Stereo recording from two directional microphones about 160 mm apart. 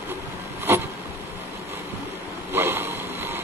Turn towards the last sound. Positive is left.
turn(degrees=-15)  # may be behind; listen again after turning